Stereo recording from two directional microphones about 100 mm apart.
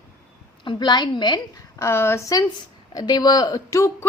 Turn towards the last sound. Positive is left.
turn(degrees=35)  # may be behind; listen again after turning